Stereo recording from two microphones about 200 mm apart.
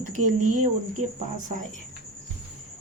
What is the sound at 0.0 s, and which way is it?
Speech, 40° right (ahead or behind).